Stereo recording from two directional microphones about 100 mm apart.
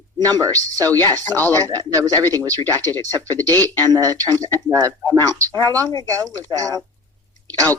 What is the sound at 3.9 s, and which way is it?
Speech, 40° right (ahead or behind).